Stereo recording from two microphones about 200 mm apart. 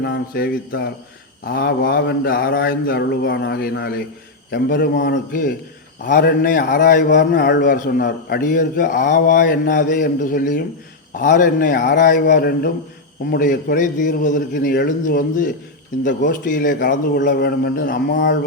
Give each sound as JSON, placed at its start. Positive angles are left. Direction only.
{"t": 0.0, "sound": "a man's voice", "side_deg": 55}
{"t": 5.3, "sound": "a man's voice", "side_deg": 45}